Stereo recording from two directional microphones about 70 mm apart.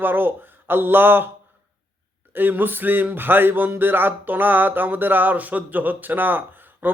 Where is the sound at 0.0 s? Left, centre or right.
Right.